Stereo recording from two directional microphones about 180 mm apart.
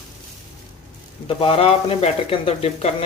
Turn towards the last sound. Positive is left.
turn(degrees=35)  # may be behind; listen again after turning